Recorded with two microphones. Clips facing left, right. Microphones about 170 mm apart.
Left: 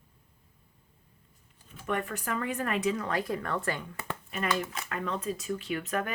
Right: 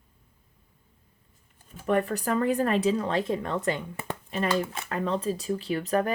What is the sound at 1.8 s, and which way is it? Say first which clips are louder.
Speech: right 7 dB; 35° right (ahead or behind).